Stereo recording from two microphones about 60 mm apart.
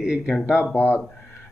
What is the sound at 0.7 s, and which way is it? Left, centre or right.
Speech, left.